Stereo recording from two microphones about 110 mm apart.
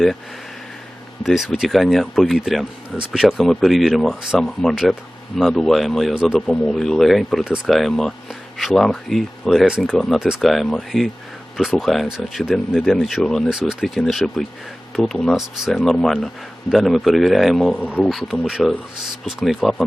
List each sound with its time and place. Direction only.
1.2 s speech: 5° right (ahead or behind)